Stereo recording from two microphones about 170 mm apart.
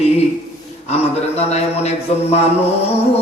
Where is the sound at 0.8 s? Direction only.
40° left (ahead or behind).